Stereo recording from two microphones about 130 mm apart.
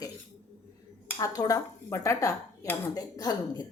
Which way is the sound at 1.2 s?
25° left (ahead or behind).